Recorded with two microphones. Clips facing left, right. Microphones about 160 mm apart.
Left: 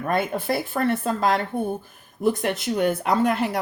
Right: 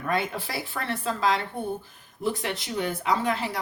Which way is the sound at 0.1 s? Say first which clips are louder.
Left 5 dB; 50° left (ahead or behind).